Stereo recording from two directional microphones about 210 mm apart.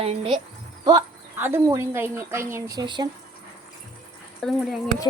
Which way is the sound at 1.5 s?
10° right (ahead or behind).